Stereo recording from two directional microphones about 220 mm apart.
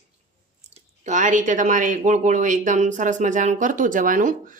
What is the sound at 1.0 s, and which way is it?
Speech, 35° right (ahead or behind).